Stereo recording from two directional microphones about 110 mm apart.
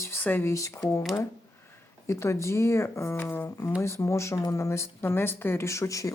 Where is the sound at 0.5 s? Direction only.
30° left (ahead or behind).